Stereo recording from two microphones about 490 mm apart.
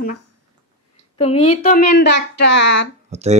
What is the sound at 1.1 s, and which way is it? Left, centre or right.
Speech, centre.